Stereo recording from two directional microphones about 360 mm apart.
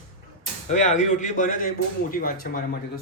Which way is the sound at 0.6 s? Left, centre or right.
Centre.